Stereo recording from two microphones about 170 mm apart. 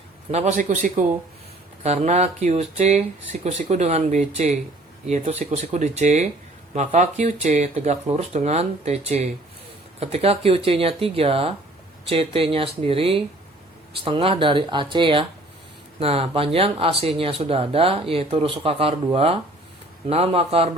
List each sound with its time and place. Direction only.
0.3 s a man's voice: 40° right (ahead or behind)